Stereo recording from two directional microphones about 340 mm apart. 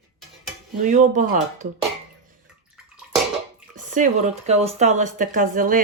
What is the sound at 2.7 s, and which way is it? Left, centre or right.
Bathtub, centre.